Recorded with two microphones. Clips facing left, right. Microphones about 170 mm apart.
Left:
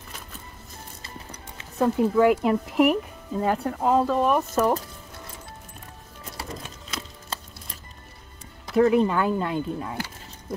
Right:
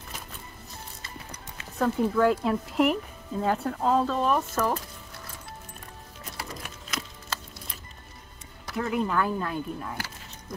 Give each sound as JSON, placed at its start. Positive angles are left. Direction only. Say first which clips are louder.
{"t": 1.3, "sound": "clip-clop", "louder": "left 1 dB", "side_deg": 25}
{"t": 2.1, "sound": "speech", "louder": "left 5 dB", "side_deg": 15}
{"t": 6.3, "sound": "music", "louder": "left 3 dB", "side_deg": 25}
{"t": 8.9, "sound": "speech", "louder": "left 5 dB", "side_deg": 20}